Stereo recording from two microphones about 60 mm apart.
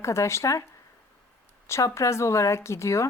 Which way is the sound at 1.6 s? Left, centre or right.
Left.